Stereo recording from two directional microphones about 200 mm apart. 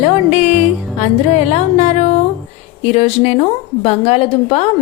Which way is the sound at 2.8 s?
30° left (ahead or behind).